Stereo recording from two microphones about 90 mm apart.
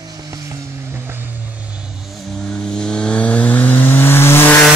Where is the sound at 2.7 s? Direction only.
10° left (ahead or behind); by 4.5 s 25° left (ahead or behind).